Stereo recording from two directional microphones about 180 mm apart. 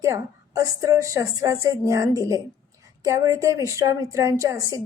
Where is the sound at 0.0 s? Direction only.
15° right (ahead or behind).